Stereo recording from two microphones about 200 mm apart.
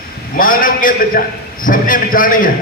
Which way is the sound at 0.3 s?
45° left (ahead or behind).